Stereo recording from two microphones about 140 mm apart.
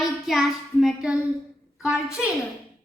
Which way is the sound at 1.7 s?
5° right (ahead or behind).